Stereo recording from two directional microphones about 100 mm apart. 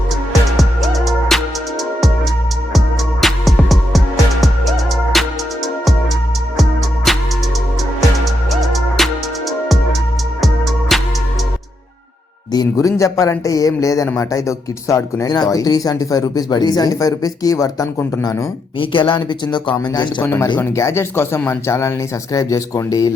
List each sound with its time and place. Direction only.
0.5 s music: centre (ahead or behind)
2.7 s music: centre (ahead or behind)
6.6 s music: centre (ahead or behind)
8.2 s music: centre (ahead or behind)
10.4 s music: centre (ahead or behind)
12.5 s speech: 35° left (ahead or behind)
18.8 s speech: 55° left (ahead or behind)
20.2 s speech: 25° left (ahead or behind)